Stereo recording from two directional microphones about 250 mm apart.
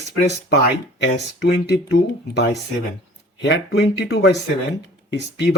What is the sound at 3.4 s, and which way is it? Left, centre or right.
Speech, left.